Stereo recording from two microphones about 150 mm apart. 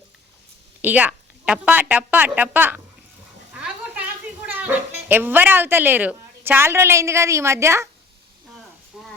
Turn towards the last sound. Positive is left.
turn(degrees=-20)  # may be behind; listen again after turning